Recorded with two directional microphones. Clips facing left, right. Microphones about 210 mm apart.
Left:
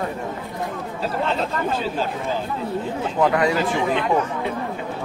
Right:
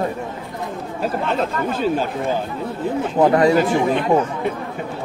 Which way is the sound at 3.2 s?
35° right (ahead or behind).